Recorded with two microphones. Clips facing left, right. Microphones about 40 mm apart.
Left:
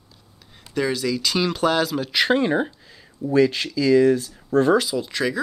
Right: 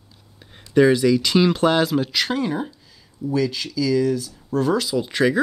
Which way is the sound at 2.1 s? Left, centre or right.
Left.